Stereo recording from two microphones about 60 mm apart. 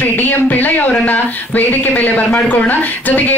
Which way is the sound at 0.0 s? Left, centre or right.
Left.